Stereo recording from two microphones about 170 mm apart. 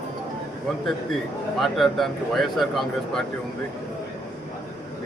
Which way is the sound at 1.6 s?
Centre (ahead or behind).